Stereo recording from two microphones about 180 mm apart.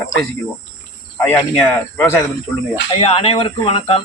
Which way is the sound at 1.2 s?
10° left (ahead or behind).